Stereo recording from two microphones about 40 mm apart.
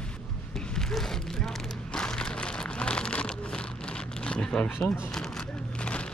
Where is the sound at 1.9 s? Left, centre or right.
Left.